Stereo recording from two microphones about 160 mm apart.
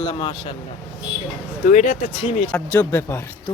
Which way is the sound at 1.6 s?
55° left (ahead or behind).